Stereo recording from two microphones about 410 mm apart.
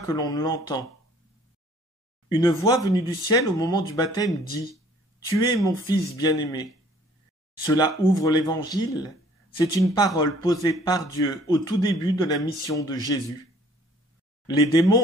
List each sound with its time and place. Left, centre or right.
0.0 s speech: centre
2.2 s speech: centre
14.7 s speech: centre